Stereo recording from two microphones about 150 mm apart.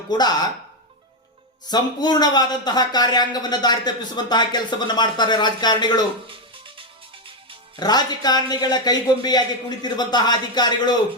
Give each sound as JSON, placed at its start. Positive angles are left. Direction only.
{"t": 0.1, "sound": "speech", "side_deg": 25}
{"t": 1.7, "sound": "speech", "side_deg": 30}
{"t": 7.8, "sound": "speech", "side_deg": 25}